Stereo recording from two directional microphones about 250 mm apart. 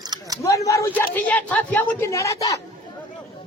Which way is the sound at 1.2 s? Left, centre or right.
Centre.